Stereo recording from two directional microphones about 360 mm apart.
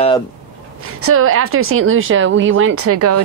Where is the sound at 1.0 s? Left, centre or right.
Right.